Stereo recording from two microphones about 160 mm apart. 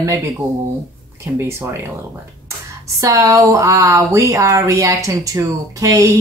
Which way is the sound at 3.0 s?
20° right (ahead or behind).